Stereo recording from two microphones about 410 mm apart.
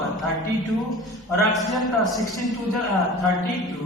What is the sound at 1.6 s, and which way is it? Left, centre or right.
Speech, centre.